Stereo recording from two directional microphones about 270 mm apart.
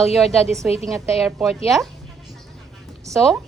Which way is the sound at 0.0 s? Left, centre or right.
Centre.